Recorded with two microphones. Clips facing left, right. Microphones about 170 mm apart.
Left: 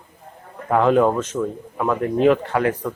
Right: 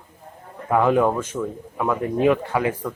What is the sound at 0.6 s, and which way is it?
A man's voice, 10° right (ahead or behind).